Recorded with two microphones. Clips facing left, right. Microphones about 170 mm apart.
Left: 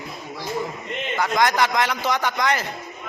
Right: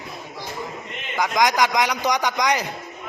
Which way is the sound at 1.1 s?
15° right (ahead or behind).